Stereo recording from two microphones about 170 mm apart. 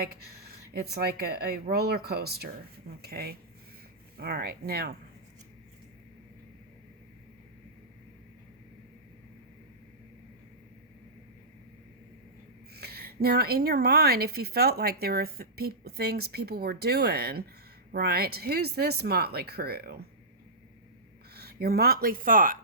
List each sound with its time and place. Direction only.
0.0 s speech: 65° right (ahead or behind)
12.7 s speech: 65° right (ahead or behind)
21.3 s speech: 65° right (ahead or behind)